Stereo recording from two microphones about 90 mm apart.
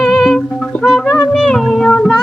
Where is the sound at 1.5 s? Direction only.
10° left (ahead or behind).